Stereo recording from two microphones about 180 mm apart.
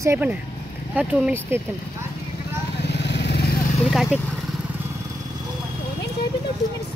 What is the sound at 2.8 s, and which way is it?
Vehicle, 70° left (ahead or behind).